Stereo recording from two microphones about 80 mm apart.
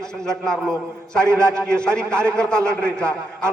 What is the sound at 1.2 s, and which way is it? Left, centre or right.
Speech, right.